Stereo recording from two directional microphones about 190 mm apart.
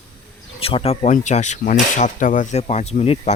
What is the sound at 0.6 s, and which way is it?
Speech, 30° left (ahead or behind).